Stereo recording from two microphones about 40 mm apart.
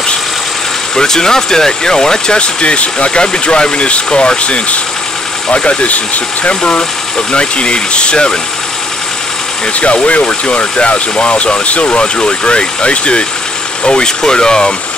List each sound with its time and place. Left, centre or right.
0.9 s speech: centre
9.8 s speech: left; by 14.7 s centre